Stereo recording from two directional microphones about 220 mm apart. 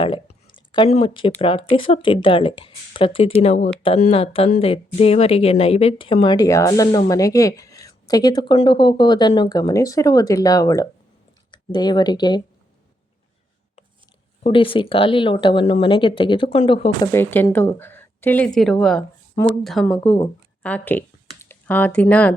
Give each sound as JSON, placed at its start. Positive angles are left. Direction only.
{"t": 0.0, "sound": "a sound", "side_deg": 20}
{"t": 1.4, "sound": "a woman's voice", "side_deg": 25}
{"t": 14.4, "sound": "a woman's voice", "side_deg": 25}
{"t": 17.1, "sound": "a woman's voice", "side_deg": 10}